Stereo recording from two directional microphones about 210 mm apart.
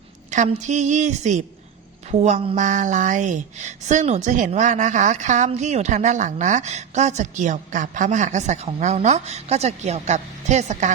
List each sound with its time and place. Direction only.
0.3 s speech: 35° right (ahead or behind)